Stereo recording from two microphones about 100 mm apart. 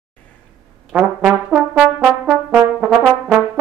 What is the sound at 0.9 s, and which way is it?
Brass instrument, 10° right (ahead or behind).